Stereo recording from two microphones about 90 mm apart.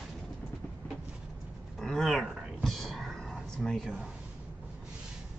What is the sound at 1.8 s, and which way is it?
Dog, 5° left (ahead or behind).